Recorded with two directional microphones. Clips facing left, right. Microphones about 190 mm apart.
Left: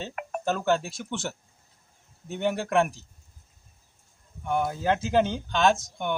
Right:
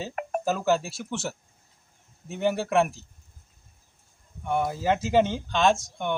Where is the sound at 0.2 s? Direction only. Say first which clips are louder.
Right 7 dB; 40° right (ahead or behind).